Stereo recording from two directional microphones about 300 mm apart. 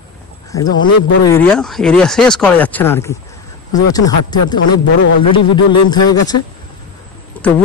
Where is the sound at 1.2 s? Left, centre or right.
Centre.